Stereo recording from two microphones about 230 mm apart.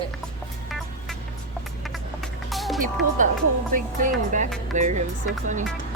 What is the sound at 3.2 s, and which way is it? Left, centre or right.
Speech, right.